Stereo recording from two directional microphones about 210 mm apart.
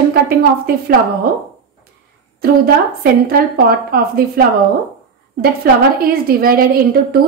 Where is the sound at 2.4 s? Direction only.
45° right (ahead or behind).